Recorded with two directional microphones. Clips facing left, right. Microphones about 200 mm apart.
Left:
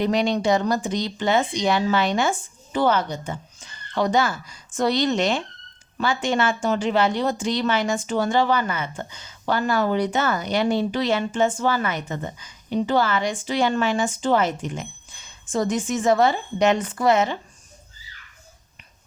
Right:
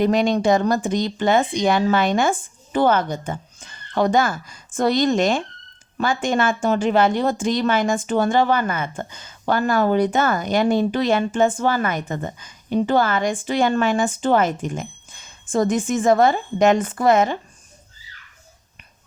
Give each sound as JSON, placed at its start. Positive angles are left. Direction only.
{"t": 0.0, "sound": "a woman's voice", "side_deg": -50}